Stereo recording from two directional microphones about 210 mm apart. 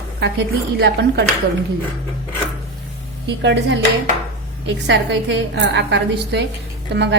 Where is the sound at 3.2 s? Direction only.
55° right (ahead or behind).